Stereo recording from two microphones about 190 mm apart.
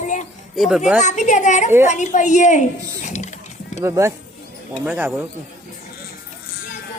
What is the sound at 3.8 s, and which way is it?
Speech, 15° right (ahead or behind).